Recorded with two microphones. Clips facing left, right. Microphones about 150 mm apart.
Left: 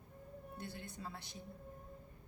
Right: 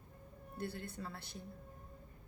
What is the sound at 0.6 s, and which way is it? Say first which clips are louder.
Speech: right 6 dB; 20° left (ahead or behind).